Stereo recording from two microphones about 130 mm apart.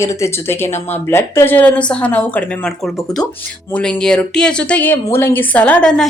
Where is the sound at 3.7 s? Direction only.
5° left (ahead or behind).